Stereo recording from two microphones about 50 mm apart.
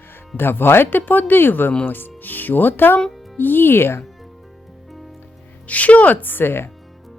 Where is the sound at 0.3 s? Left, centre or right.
Left.